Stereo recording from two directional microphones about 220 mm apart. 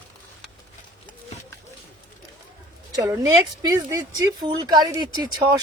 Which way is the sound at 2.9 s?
15° right (ahead or behind).